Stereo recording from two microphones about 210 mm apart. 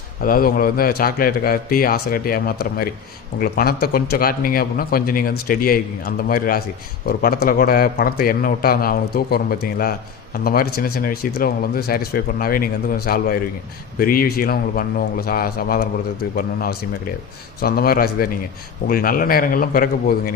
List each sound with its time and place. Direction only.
0.2 s speech: 45° left (ahead or behind)